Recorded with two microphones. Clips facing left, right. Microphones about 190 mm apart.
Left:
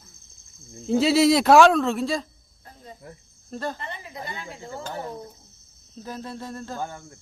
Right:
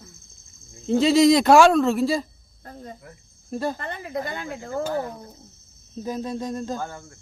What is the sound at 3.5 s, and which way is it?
Speech, 10° right (ahead or behind).